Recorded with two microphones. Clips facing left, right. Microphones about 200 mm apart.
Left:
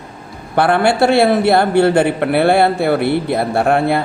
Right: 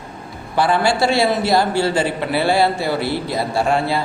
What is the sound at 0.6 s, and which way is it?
A man's voice, 60° left (ahead or behind).